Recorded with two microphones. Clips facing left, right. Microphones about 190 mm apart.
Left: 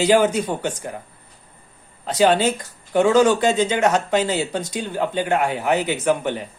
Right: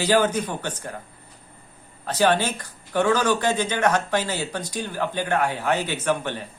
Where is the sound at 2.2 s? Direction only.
20° left (ahead or behind).